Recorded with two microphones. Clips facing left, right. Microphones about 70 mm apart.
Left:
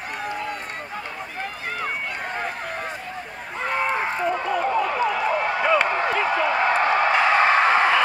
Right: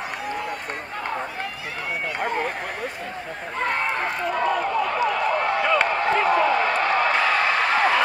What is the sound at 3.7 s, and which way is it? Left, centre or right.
Run, centre.